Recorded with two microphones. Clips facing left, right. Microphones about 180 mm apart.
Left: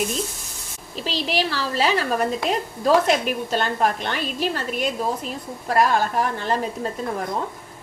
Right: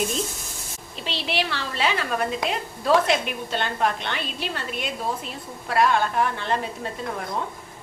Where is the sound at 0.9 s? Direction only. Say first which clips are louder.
Left 3 dB; 40° left (ahead or behind).